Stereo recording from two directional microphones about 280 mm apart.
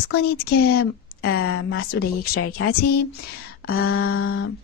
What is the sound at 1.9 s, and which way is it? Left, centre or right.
Speech, left.